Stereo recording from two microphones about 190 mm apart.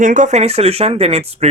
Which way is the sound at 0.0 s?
40° right (ahead or behind).